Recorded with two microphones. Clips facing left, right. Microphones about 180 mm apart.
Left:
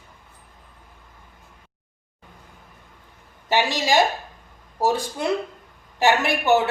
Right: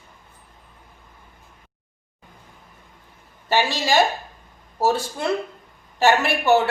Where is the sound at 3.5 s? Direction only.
15° left (ahead or behind).